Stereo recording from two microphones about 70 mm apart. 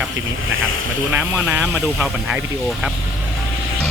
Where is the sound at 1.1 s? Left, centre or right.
Right.